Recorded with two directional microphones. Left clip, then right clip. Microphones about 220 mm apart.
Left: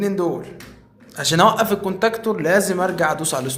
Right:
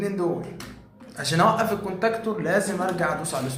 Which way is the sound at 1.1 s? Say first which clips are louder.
Left 5 dB; 55° left (ahead or behind).